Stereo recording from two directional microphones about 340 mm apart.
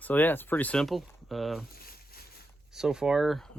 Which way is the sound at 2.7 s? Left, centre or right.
Centre.